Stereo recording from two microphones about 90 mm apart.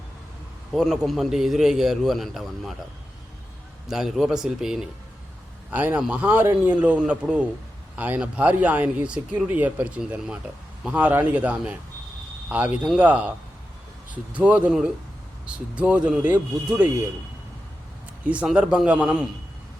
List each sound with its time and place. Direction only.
0.7 s a man's voice: centre (ahead or behind)
3.8 s a man's voice: 5° right (ahead or behind)
5.7 s a man's voice: 15° right (ahead or behind)
14.7 s a man's voice: 5° right (ahead or behind)
18.5 s a man's voice: 10° right (ahead or behind)